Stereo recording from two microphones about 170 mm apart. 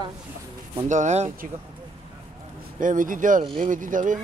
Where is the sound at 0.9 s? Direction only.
45° right (ahead or behind).